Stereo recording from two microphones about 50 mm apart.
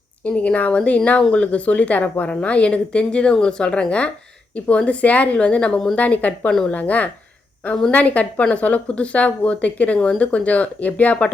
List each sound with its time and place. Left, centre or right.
0.3 s a woman's voice: left